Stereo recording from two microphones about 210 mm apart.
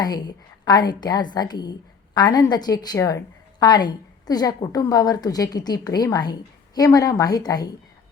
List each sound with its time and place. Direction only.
0.0 s a woman's voice: 20° left (ahead or behind)